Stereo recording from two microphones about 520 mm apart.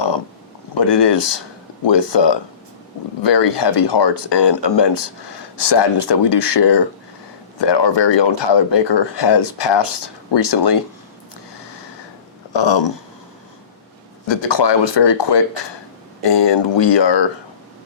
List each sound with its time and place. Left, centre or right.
0.8 s speech: left
12.5 s speech: left
14.3 s speech: left